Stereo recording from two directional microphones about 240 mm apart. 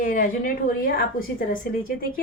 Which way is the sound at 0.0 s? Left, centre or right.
Left.